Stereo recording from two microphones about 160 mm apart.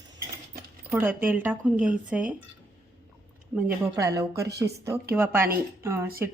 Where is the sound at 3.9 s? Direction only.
20° right (ahead or behind).